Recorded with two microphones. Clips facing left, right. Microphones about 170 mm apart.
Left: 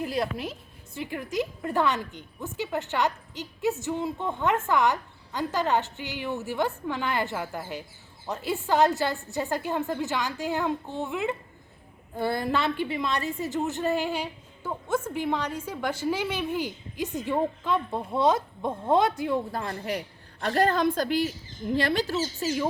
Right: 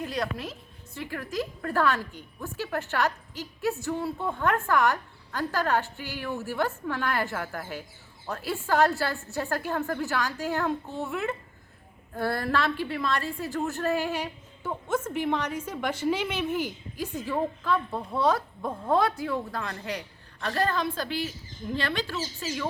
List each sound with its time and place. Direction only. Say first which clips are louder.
0.0 s a woman's voice: left 2 dB; 25° left (ahead or behind); by 16.4 s 10° left (ahead or behind)
17.0 s a woman's voice: left 2 dB; 20° left (ahead or behind)